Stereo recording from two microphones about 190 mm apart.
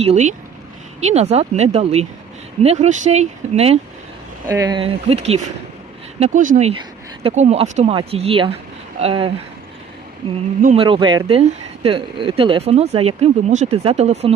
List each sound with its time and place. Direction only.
0.0 s speech: 35° right (ahead or behind)
4.4 s speech: 20° right (ahead or behind)
10.8 s speech: 25° right (ahead or behind)